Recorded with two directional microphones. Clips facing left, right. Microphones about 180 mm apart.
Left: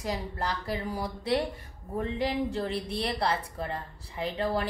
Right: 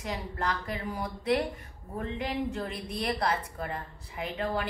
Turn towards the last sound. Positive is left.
turn(degrees=35)  # may be behind; listen again after turning